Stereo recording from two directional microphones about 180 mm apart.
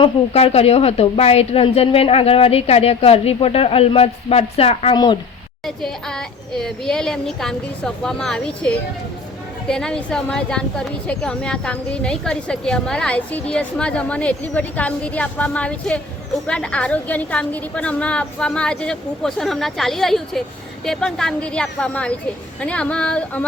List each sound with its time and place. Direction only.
0.0 s a woman's voice: 35° left (ahead or behind)
5.6 s a woman's voice: 5° left (ahead or behind)